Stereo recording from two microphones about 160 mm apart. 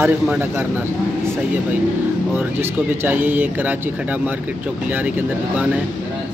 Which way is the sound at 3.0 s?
10° right (ahead or behind).